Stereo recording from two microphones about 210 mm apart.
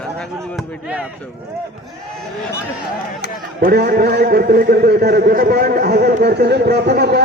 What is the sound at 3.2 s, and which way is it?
Speech, 55° left (ahead or behind).